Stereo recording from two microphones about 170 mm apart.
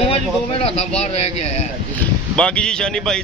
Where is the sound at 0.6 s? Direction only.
40° left (ahead or behind).